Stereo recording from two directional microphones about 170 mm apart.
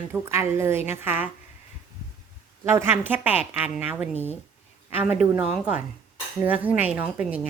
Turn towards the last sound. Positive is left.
turn(degrees=-10)  # may be behind; listen again after turning